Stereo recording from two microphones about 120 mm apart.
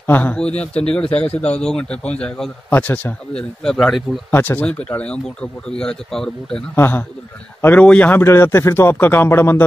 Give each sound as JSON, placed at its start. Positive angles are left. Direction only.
{"t": 0.0, "sound": "speech", "side_deg": 15}
{"t": 2.7, "sound": "speech", "side_deg": 15}
{"t": 3.6, "sound": "speech", "side_deg": 5}
{"t": 4.3, "sound": "speech", "side_deg": 15}
{"t": 6.7, "sound": "a man's voice", "side_deg": 15}